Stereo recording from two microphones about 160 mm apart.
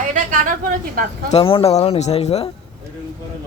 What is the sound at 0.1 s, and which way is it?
Speech, 55° right (ahead or behind).